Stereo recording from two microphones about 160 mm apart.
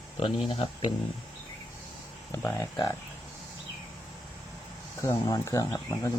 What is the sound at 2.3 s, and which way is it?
Speech, 10° left (ahead or behind).